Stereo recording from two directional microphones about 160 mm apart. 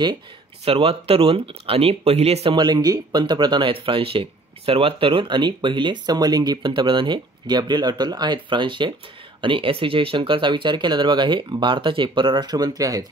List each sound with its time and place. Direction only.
0.7 s speech: 35° right (ahead or behind)